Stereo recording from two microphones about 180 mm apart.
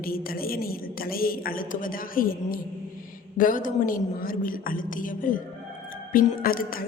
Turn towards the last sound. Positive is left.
turn(degrees=50)  # may be behind; listen again after turning